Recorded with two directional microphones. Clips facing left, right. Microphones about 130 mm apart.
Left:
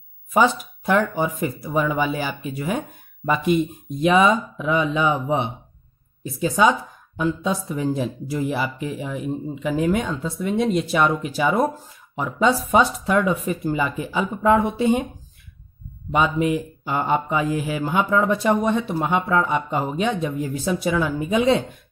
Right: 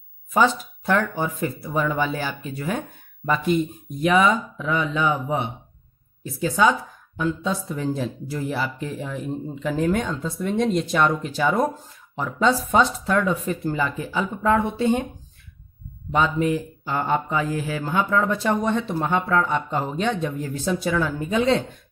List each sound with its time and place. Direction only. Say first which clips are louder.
0.3 s speech: left 1 dB; 15° left (ahead or behind)
16.1 s speech: left 1 dB; 15° left (ahead or behind)